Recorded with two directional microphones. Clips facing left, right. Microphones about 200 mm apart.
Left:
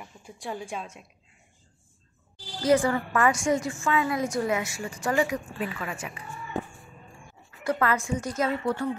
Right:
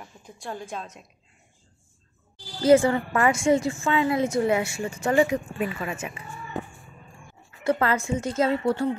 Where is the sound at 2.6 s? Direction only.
25° right (ahead or behind).